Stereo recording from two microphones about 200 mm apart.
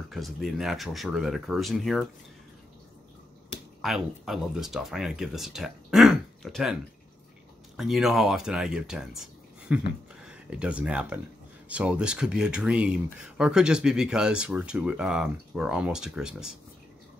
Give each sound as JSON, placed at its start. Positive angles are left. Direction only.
{"t": 0.1, "sound": "speech", "side_deg": 0}
{"t": 3.8, "sound": "speech", "side_deg": 0}